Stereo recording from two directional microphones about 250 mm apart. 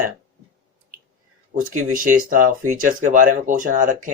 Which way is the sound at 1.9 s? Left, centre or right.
Right.